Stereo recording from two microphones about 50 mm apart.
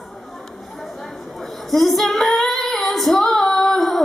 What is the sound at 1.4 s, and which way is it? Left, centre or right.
Female singing, centre.